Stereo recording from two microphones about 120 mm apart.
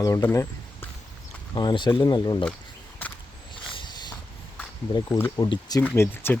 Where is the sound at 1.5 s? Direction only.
40° left (ahead or behind).